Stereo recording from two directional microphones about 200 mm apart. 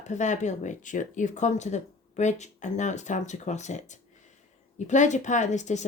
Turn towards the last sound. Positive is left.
turn(degrees=35)  # may be behind; listen again after turning